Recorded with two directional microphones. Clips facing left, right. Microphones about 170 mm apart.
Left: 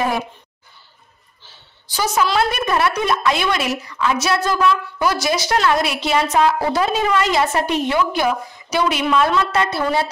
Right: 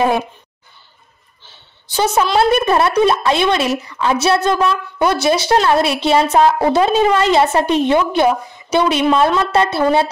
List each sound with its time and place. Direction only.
1.4 s a woman's voice: 25° right (ahead or behind)